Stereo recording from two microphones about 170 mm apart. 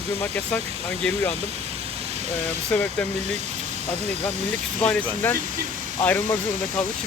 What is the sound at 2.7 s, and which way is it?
Speech, 10° left (ahead or behind).